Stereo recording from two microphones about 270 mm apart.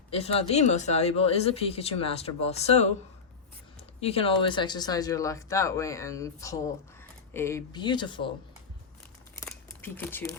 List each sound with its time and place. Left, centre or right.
0.1 s speech: left
4.0 s speech: left
9.4 s crumpling: centre